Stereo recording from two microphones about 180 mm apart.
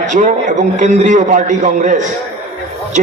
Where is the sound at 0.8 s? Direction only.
45° right (ahead or behind).